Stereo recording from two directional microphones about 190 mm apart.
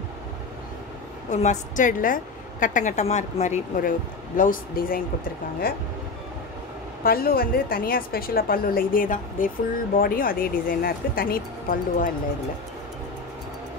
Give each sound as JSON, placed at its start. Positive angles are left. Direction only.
{"t": 1.3, "sound": "a woman's voice", "side_deg": 40}
{"t": 7.0, "sound": "a woman's voice", "side_deg": 50}